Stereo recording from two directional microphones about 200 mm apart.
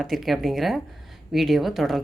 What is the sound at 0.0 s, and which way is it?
Speech, centre (ahead or behind).